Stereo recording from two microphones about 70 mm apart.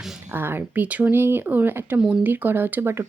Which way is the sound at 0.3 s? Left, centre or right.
Right.